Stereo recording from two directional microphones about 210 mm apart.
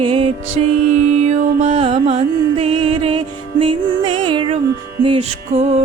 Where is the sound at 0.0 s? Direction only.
25° right (ahead or behind).